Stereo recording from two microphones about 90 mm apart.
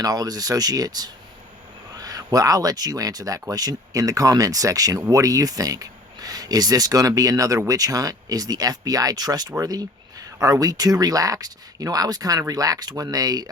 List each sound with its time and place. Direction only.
0.0 s speech: 45° right (ahead or behind)